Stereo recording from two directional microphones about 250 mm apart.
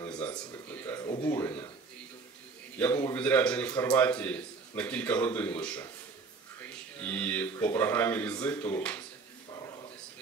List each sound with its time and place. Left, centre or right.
0.3 s a man's voice: centre
2.8 s a man's voice: centre
9.5 s a sound: centre